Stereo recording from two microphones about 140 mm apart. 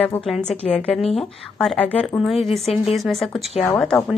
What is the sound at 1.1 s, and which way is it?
Speech, centre (ahead or behind).